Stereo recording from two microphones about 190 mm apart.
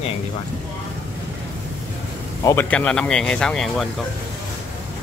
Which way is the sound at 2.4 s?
10° left (ahead or behind).